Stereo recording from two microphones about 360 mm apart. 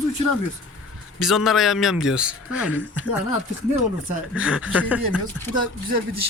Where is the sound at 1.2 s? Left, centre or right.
Centre.